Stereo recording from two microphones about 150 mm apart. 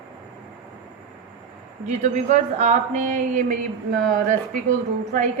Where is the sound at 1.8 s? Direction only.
50° right (ahead or behind).